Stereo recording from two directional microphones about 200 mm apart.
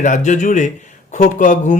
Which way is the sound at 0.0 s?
40° left (ahead or behind).